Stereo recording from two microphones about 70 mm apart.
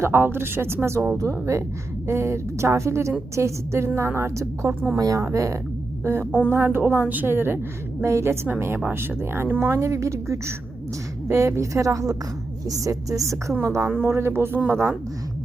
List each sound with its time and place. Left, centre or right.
0.0 s a woman's voice: right
4.9 s a woman's voice: right
6.1 s a woman's voice: right
13.8 s a woman's voice: right